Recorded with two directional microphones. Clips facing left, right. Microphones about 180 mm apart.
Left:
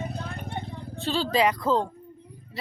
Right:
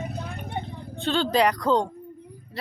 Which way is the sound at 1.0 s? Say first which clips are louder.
Right 2 dB; centre (ahead or behind).